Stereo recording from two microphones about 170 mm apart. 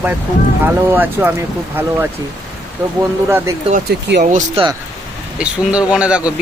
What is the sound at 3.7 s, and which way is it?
Speech, 75° right (ahead or behind).